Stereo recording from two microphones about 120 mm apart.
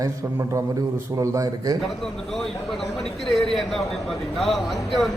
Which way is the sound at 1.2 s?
30° right (ahead or behind).